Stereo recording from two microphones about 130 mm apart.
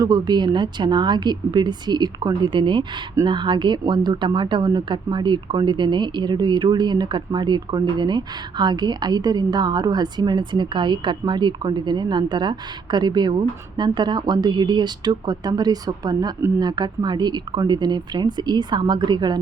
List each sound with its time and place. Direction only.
0.0 s speech: 30° right (ahead or behind)